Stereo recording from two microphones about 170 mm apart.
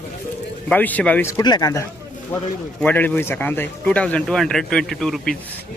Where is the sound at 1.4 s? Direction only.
25° left (ahead or behind).